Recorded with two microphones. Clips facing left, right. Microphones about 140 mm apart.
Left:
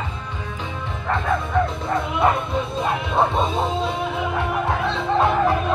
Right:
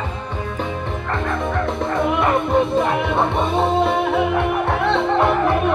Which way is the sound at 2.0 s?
55° right (ahead or behind).